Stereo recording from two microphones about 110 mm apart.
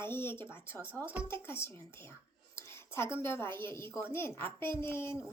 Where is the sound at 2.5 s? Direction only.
25° left (ahead or behind).